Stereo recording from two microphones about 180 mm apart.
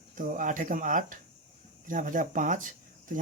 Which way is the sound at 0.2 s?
50° right (ahead or behind).